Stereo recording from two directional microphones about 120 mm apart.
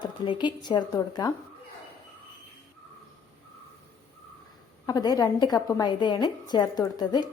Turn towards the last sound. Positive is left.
turn(degrees=35)  # may be behind; listen again after turning